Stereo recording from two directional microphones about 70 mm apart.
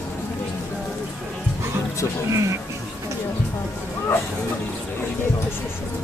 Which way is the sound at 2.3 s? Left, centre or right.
Right.